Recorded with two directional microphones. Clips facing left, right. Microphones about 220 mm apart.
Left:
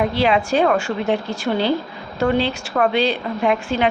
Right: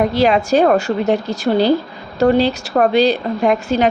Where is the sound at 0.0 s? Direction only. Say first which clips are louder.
Right 4 dB; 40° right (ahead or behind).